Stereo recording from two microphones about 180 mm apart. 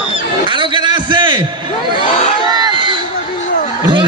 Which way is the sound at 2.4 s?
25° right (ahead or behind).